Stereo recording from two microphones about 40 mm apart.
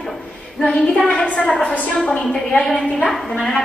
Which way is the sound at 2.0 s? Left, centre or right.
Centre.